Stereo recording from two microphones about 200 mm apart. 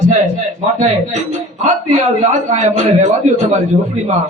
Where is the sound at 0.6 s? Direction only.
35° right (ahead or behind).